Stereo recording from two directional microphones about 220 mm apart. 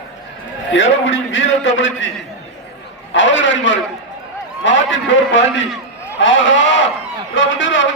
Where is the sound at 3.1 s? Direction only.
60° left (ahead or behind).